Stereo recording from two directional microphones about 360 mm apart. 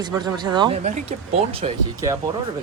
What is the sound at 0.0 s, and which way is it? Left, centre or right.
Speech, centre.